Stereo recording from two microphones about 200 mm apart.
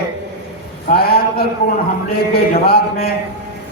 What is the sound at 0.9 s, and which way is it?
A man's voice, 50° left (ahead or behind).